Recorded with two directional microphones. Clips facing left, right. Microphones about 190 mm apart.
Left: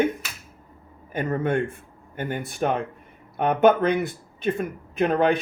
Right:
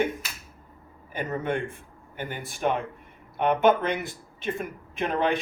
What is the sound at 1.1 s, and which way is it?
Speech, 45° left (ahead or behind).